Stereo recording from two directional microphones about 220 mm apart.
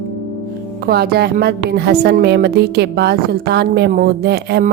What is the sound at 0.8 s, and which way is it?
A woman's voice, 45° right (ahead or behind).